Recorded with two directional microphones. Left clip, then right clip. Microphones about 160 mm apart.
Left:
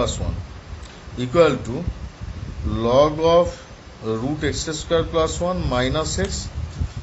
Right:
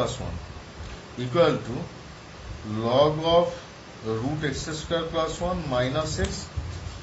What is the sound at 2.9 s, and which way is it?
Speech, 60° left (ahead or behind).